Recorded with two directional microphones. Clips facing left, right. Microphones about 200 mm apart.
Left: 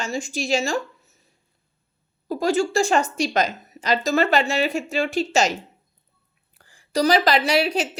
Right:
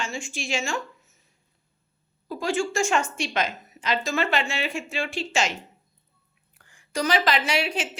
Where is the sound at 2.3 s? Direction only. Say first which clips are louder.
Left 5 dB; 40° left (ahead or behind).